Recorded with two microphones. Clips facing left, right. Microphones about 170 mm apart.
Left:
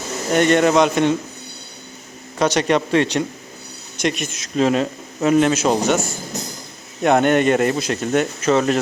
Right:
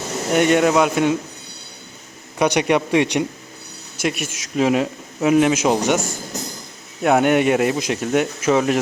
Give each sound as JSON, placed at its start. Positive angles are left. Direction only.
{"t": 0.3, "sound": "a man's voice", "side_deg": -10}
{"t": 2.4, "sound": "a man's voice", "side_deg": -10}